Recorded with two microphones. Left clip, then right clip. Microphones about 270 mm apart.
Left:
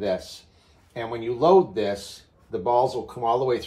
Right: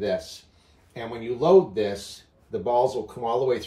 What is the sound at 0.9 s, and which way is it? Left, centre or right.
Speech, centre.